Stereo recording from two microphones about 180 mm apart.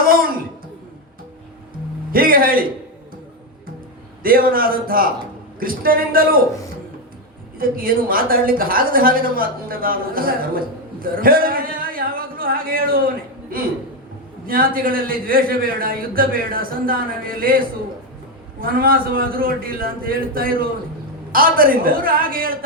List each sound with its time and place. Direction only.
0.0 s a sound: 50° right (ahead or behind)
2.1 s a man's voice: 55° right (ahead or behind)
4.2 s a man's voice: 55° right (ahead or behind)
7.6 s a man's voice: 50° right (ahead or behind)
11.0 s a sound: 55° right (ahead or behind)
14.4 s a man's voice: 55° right (ahead or behind)